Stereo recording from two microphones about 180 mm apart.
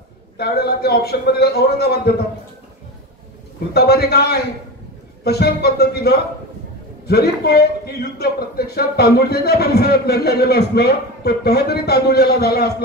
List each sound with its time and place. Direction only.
0.4 s a man's voice: 60° left (ahead or behind)
3.7 s a man's voice: 65° left (ahead or behind)